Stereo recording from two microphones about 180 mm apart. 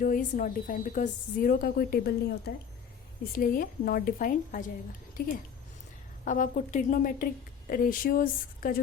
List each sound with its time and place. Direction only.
0.0 s a woman's voice: 50° left (ahead or behind)